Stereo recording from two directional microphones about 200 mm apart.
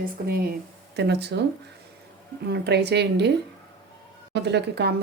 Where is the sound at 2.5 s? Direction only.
55° right (ahead or behind).